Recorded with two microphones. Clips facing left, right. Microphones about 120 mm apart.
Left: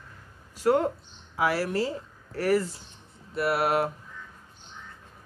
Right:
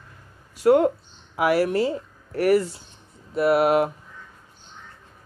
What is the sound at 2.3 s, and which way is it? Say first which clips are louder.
Speech: right 5 dB; 70° right (ahead or behind).